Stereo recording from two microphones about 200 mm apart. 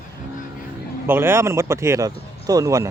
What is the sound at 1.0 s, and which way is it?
Speech, 10° right (ahead or behind).